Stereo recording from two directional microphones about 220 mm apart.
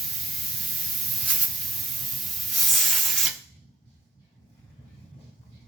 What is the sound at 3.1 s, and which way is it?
Spray, centre (ahead or behind).